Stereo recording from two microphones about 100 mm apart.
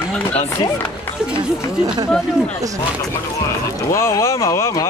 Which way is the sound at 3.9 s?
30° left (ahead or behind).